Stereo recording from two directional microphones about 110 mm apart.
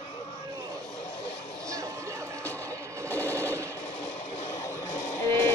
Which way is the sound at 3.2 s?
15° left (ahead or behind).